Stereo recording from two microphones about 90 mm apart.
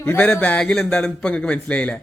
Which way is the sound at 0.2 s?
15° left (ahead or behind).